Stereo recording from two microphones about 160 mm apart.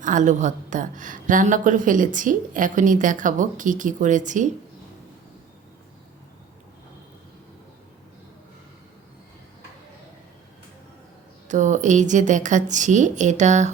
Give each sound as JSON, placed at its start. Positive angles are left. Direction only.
{"t": 0.0, "sound": "a woman's voice", "side_deg": -50}
{"t": 11.4, "sound": "a woman's voice", "side_deg": -50}